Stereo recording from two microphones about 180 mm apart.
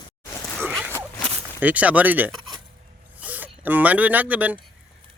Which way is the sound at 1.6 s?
10° right (ahead or behind).